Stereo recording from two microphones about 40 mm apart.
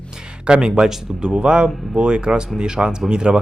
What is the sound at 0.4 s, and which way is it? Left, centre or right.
Speech, right.